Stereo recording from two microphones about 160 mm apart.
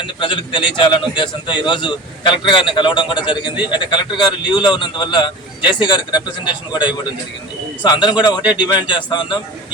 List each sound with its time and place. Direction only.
0.2 s a man's voice: 30° left (ahead or behind)